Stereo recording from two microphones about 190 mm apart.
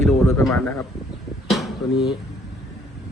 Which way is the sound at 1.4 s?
Centre (ahead or behind).